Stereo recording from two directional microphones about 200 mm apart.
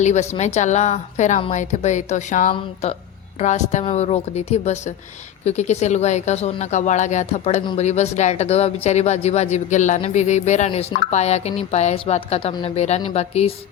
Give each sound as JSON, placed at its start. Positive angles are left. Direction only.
{"t": 0.0, "sound": "speech", "side_deg": 35}